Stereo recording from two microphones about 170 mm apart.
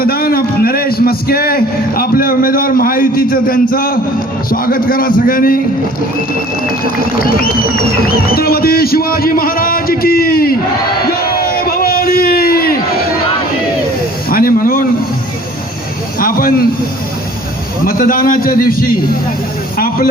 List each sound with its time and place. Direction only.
0.0 s a man's voice: 60° left (ahead or behind)
7.0 s a man's voice: 60° left (ahead or behind)
11.1 s crowd: 60° left (ahead or behind)
14.3 s a sound: 60° left (ahead or behind)
16.1 s a man's voice: 55° left (ahead or behind)
17.8 s a man's voice: 60° left (ahead or behind)